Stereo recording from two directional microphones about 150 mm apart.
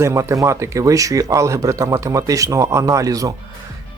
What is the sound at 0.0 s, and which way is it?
Speech, 20° right (ahead or behind).